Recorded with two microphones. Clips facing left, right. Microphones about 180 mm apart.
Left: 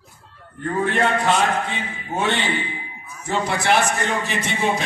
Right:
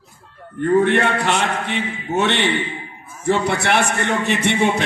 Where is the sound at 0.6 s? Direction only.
70° right (ahead or behind).